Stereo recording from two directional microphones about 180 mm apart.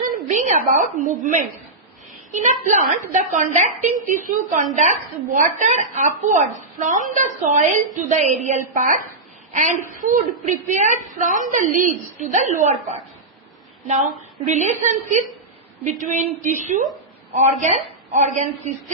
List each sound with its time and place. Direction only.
0.0 s a woman's voice: 45° right (ahead or behind)
14.4 s a woman's voice: 40° right (ahead or behind)
18.1 s a woman's voice: 40° right (ahead or behind)